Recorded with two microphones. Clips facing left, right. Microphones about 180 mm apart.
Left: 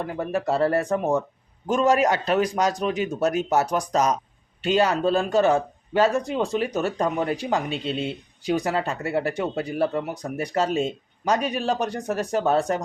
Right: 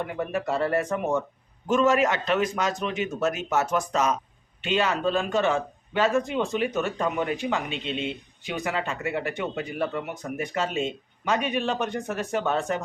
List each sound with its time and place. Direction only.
0.0 s speech: 35° left (ahead or behind)